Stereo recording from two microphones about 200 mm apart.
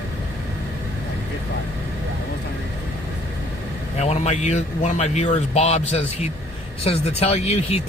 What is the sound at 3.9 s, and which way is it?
A man's voice, 35° left (ahead or behind).